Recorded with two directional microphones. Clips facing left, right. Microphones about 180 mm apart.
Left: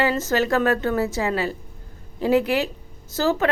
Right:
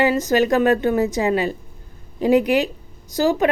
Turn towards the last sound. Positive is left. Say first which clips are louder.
# right 3 dB
turn(degrees=-15)  # may be behind; listen again after turning